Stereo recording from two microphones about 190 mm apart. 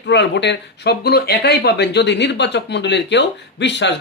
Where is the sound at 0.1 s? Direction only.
70° left (ahead or behind).